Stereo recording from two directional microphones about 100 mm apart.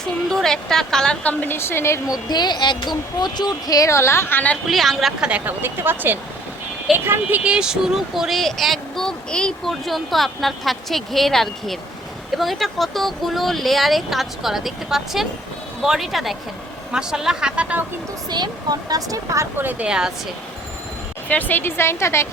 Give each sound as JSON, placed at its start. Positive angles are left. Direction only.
{"t": 0.0, "sound": "a woman's voice", "side_deg": 5}
{"t": 2.3, "sound": "speech", "side_deg": 45}
{"t": 4.6, "sound": "speech", "side_deg": 0}
{"t": 5.3, "sound": "speech", "side_deg": -20}
{"t": 18.3, "sound": "speech", "side_deg": -45}
{"t": 19.5, "sound": "speech", "side_deg": -15}
{"t": 21.2, "sound": "a woman's voice", "side_deg": 20}